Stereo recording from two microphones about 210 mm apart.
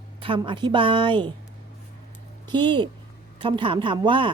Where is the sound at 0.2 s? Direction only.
25° right (ahead or behind).